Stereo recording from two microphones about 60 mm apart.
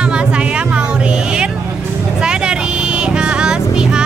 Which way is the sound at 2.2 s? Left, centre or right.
Centre.